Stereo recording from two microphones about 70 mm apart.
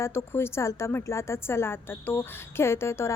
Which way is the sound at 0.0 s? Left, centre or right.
Left.